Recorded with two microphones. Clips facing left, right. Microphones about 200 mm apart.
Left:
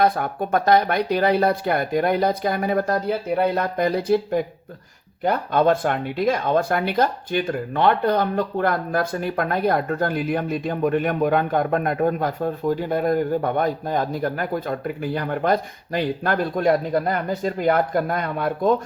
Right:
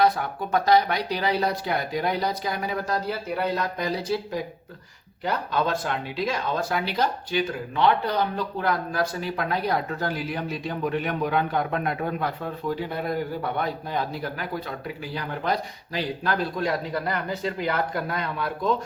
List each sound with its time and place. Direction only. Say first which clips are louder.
0.0 s speech: left 2 dB; 50° left (ahead or behind)